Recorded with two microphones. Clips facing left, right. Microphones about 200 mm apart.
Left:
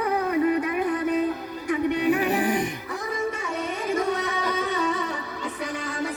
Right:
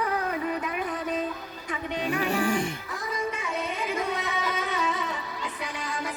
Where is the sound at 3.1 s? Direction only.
50° left (ahead or behind).